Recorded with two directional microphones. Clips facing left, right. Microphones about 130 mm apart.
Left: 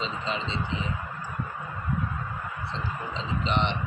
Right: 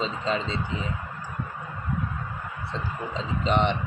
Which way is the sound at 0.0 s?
45° right (ahead or behind).